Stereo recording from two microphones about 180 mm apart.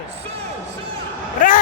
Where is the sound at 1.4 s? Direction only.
45° left (ahead or behind).